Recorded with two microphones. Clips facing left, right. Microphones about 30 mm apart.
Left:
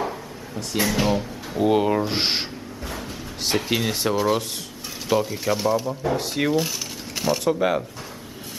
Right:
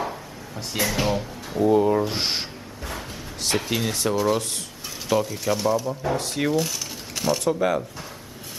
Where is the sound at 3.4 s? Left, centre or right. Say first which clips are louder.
Left 2 dB; centre.